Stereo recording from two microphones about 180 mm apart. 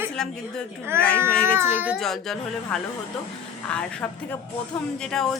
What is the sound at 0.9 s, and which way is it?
A child's voice, 15° right (ahead or behind).